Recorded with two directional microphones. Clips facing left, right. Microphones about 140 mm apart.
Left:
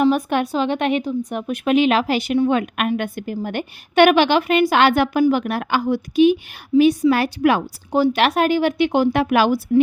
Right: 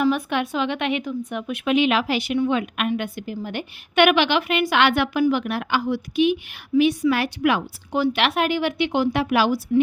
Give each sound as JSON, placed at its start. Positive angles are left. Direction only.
{"t": 0.1, "sound": "a woman's voice", "side_deg": 45}